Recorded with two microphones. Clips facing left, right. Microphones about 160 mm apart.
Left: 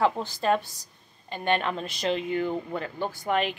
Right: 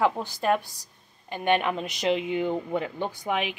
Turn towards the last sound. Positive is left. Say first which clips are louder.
# left 2 dB
turn(degrees=-10)  # may be behind; listen again after turning